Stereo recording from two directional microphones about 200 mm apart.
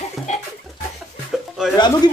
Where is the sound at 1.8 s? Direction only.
20° left (ahead or behind).